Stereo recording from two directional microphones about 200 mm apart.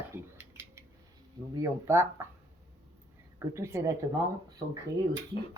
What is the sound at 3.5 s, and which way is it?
Speech, 15° right (ahead or behind).